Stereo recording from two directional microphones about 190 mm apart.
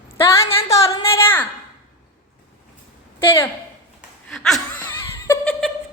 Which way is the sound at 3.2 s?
15° left (ahead or behind).